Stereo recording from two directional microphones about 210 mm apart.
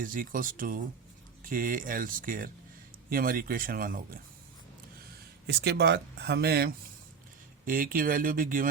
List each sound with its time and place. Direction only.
0.0 s speech: 40° right (ahead or behind)
5.5 s speech: 50° right (ahead or behind)